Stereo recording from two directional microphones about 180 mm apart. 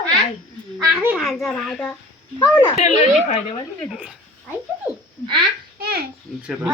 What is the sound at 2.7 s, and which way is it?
Speech, 40° left (ahead or behind).